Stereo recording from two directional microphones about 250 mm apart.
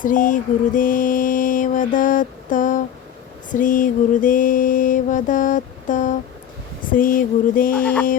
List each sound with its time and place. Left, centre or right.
0.0 s mantra: left